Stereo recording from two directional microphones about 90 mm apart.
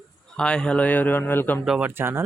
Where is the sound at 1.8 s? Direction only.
25° right (ahead or behind).